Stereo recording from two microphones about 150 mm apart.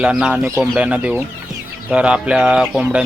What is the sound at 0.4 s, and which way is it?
Speech, 20° right (ahead or behind).